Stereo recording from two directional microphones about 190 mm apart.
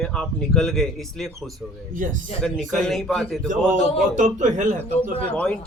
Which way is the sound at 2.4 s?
Centre (ahead or behind).